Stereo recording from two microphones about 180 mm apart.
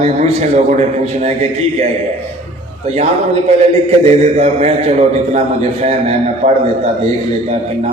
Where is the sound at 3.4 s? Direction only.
35° right (ahead or behind).